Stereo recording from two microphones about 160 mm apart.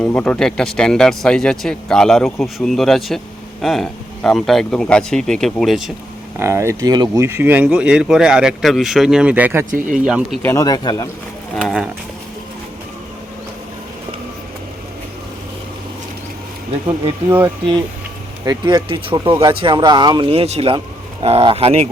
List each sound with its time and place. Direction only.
0.0 s speech: 10° left (ahead or behind)
6.4 s speech: 15° right (ahead or behind)
10.4 s speech: 20° left (ahead or behind)
11.5 s speech: centre (ahead or behind)
18.4 s speech: 30° right (ahead or behind)